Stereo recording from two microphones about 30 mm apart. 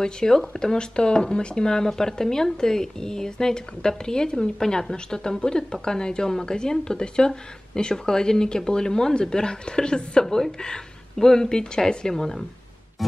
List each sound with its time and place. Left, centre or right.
0.0 s speech: centre
10.2 s speech: centre